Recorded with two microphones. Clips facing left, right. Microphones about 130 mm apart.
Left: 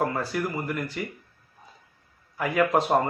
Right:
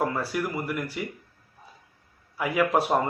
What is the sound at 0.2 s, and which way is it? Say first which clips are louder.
Speech: even; 10° right (ahead or behind).